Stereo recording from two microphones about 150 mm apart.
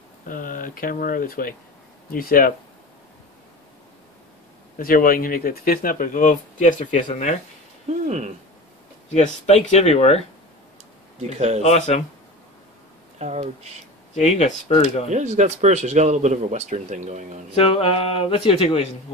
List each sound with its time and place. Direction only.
0.3 s speech: 65° left (ahead or behind)
4.7 s speech: 70° left (ahead or behind)
9.1 s speech: 45° left (ahead or behind)
11.1 s speech: 45° right (ahead or behind)
11.6 s speech: 45° left (ahead or behind)
13.2 s speech: 50° right (ahead or behind)
14.1 s speech: 50° left (ahead or behind)
15.0 s speech: 50° right (ahead or behind)
17.6 s speech: 40° left (ahead or behind)